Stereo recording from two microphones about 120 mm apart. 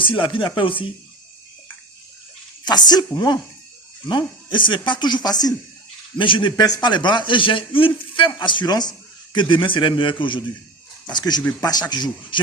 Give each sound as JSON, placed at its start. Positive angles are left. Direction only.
{"t": 0.0, "sound": "a man's voice", "side_deg": 45}
{"t": 2.6, "sound": "a man's voice", "side_deg": 35}